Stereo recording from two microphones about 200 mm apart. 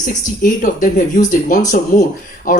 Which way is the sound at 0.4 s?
40° left (ahead or behind).